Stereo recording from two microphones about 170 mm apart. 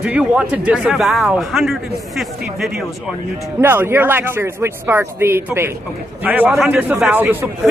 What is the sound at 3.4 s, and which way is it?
Speech, 15° right (ahead or behind).